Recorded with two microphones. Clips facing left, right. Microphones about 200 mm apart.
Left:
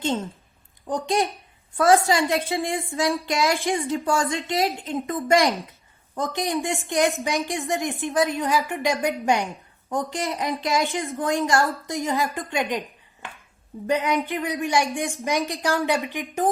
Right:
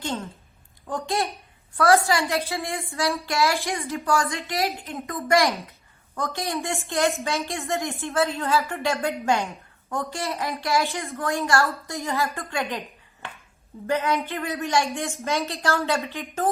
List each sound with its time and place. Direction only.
0.0 s a woman's voice: 25° left (ahead or behind)
13.8 s a woman's voice: 15° left (ahead or behind)